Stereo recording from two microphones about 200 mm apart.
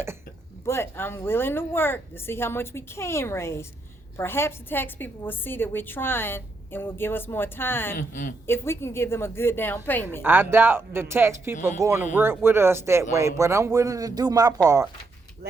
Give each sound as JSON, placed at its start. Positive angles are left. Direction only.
{"t": 0.6, "sound": "a woman's voice", "side_deg": 10}
{"t": 7.9, "sound": "a woman's voice", "side_deg": 40}
{"t": 8.4, "sound": "a woman's voice", "side_deg": 10}
{"t": 10.2, "sound": "speech", "side_deg": -10}